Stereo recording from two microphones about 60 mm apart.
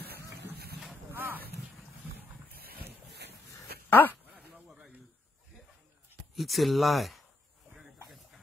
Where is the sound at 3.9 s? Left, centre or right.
Left.